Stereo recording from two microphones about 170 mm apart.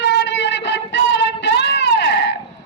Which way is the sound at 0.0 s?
90° left.